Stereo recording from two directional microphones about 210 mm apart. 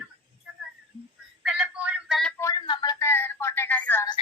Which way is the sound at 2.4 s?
20° left (ahead or behind).